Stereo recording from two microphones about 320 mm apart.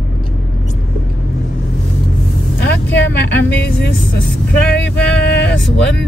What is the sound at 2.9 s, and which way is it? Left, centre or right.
Speech, left.